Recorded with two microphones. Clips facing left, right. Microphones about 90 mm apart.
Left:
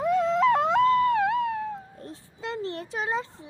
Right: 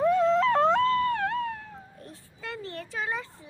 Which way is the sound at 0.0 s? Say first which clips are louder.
Even; 15° left (ahead or behind).